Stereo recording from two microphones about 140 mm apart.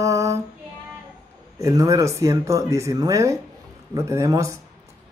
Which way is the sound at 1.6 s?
20° right (ahead or behind).